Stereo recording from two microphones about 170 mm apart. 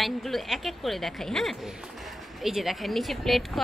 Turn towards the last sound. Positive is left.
turn(degrees=0)  # may be behind; listen again after turning